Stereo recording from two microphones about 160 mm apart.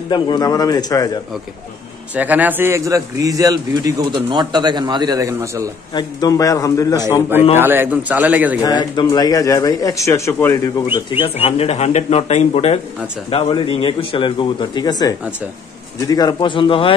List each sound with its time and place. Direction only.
0.1 s speech: 25° left (ahead or behind)
2.1 s a man's voice: 10° right (ahead or behind)
5.9 s speech: 20° left (ahead or behind)
7.5 s a man's voice: 15° right (ahead or behind)
8.6 s speech: 25° left (ahead or behind)
11.2 s speech: 40° left (ahead or behind)